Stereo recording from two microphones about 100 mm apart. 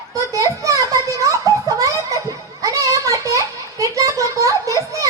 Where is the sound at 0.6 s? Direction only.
35° right (ahead or behind).